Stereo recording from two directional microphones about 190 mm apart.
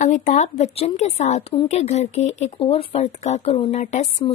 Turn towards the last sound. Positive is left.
turn(degrees=35)  # may be behind; listen again after turning